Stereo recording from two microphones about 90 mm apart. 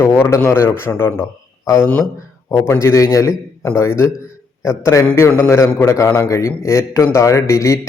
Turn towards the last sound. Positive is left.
turn(degrees=35)  # may be behind; listen again after turning